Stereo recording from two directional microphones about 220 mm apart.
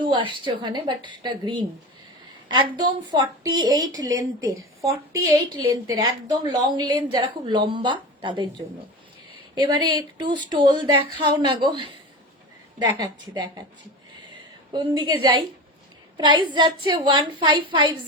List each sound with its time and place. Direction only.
0.0 s a woman's voice: 20° right (ahead or behind)
5.6 s a woman's voice: 70° right (ahead or behind)
6.1 s a woman's voice: 15° right (ahead or behind)
9.6 s a woman's voice: 20° right (ahead or behind)
14.7 s a woman's voice: 20° right (ahead or behind)